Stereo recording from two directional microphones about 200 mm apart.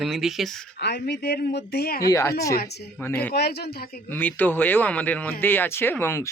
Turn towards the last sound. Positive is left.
turn(degrees=10)  # may be behind; listen again after turning